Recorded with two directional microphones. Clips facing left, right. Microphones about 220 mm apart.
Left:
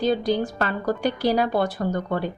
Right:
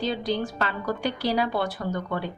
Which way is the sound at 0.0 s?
45° left (ahead or behind).